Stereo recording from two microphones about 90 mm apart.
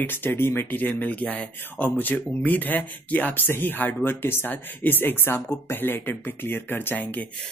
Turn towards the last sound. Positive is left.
turn(degrees=20)  # may be behind; listen again after turning